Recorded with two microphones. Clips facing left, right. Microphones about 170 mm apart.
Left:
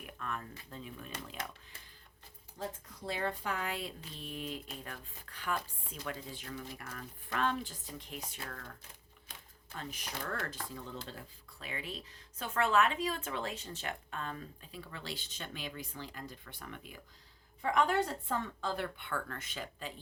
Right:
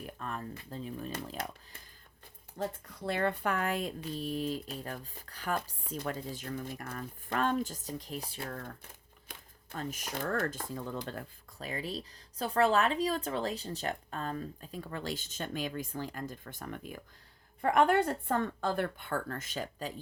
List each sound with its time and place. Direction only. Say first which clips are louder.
0.0 s speech: right 3 dB; 35° right (ahead or behind)
2.6 s speech: right 5 dB; 60° right (ahead or behind); by 8.6 s 30° right (ahead or behind)
9.7 s speech: right 5 dB; 45° right (ahead or behind)
11.7 s speech: right 5 dB; 35° right (ahead or behind)
17.6 s speech: right 5 dB; 55° right (ahead or behind)